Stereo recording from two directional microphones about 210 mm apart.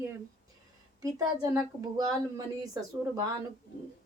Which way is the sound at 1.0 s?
15° right (ahead or behind).